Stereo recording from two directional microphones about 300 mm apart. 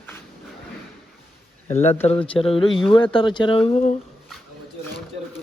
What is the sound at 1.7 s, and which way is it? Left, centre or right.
Speech, left.